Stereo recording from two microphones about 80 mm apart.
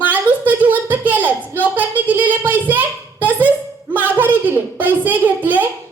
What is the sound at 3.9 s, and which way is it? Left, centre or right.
A woman's voice, right.